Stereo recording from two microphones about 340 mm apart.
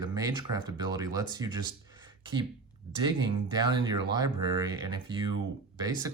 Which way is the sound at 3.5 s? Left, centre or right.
Centre.